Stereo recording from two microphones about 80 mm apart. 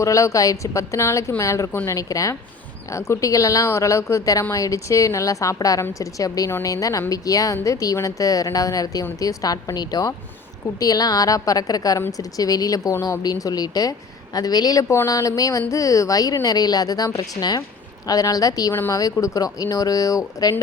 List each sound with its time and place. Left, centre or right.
0.0 s a woman's voice: left
14.8 s a woman's voice: left
18.7 s speech: left
18.9 s a woman's voice: left